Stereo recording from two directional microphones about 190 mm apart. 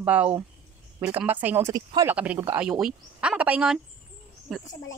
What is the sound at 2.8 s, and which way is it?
Speech, 5° right (ahead or behind).